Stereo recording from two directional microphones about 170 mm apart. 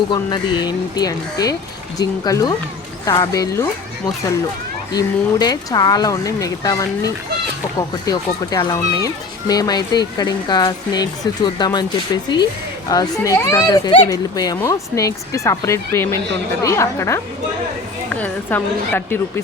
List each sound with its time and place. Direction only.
0.1 s a child's voice: 25° left (ahead or behind)
4.9 s a child's voice: 25° left (ahead or behind)